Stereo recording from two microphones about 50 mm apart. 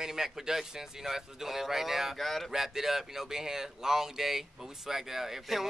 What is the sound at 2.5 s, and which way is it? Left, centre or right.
Speech, centre.